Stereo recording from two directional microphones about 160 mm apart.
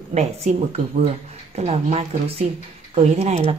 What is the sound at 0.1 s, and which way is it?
Speech, 45° right (ahead or behind).